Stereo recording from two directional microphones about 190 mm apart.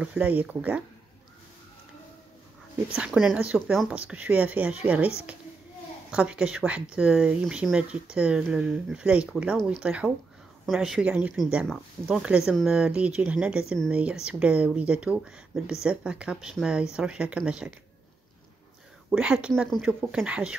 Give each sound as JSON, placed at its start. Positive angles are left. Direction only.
{"t": 0.0, "sound": "speech", "side_deg": -5}
{"t": 3.0, "sound": "speech", "side_deg": 0}
{"t": 19.0, "sound": "speech", "side_deg": -5}